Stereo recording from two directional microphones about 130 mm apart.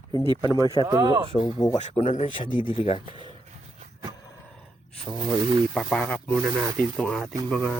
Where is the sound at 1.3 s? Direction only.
40° left (ahead or behind).